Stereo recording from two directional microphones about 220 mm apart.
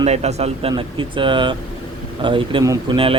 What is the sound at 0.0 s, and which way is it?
Speech, 30° right (ahead or behind).